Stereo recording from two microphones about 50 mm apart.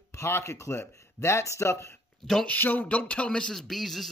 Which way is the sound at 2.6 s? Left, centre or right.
Left.